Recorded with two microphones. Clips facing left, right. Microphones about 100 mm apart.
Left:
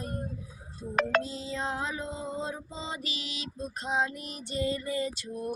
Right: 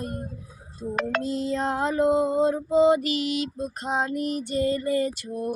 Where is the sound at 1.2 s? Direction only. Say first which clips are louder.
Right 9 dB; 60° right (ahead or behind).